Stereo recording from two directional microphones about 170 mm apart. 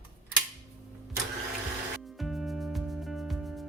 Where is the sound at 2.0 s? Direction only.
Centre (ahead or behind).